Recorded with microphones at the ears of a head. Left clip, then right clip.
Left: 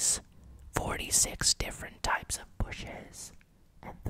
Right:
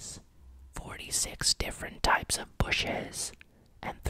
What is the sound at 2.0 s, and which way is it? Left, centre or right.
Speech, right.